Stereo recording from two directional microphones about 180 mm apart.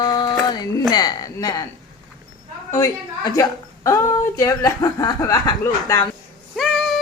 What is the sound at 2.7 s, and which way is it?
A woman's voice, 20° left (ahead or behind).